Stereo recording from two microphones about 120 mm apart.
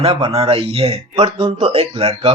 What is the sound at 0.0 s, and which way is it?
Speech, 55° right (ahead or behind).